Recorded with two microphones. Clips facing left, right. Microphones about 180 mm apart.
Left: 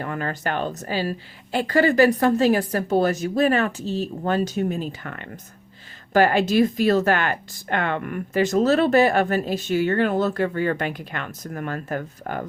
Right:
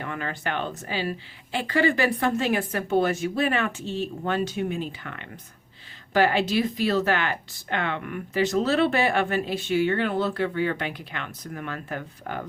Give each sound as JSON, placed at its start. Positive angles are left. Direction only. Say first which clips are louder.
{"t": 0.0, "sound": "speech", "louder": "left 4 dB", "side_deg": 40}